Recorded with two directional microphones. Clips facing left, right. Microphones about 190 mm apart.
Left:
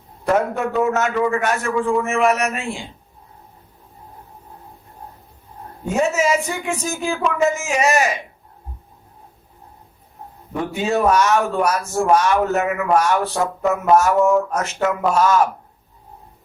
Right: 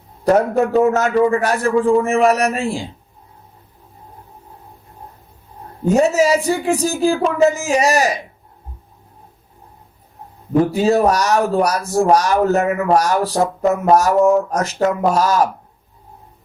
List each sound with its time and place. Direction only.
0.3 s speech: 35° right (ahead or behind)
5.8 s speech: 35° right (ahead or behind)
10.5 s speech: 35° right (ahead or behind)